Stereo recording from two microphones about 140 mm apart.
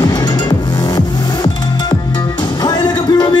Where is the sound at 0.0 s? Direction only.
30° left (ahead or behind).